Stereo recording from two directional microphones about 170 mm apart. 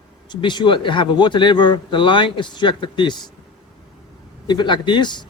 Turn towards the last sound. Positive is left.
turn(degrees=25)  # may be behind; listen again after turning